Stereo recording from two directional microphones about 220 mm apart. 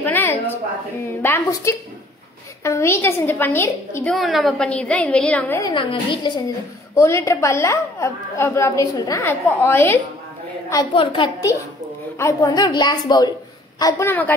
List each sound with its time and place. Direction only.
0.0 s a sound: 10° left (ahead or behind)
1.2 s a woman's voice: 10° left (ahead or behind)
4.1 s a woman's voice: centre (ahead or behind)
10.7 s a woman's voice: 20° left (ahead or behind)